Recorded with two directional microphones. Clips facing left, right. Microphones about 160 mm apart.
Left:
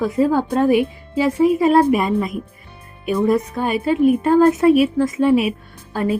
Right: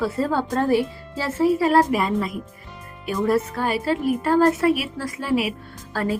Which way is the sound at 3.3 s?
20° left (ahead or behind).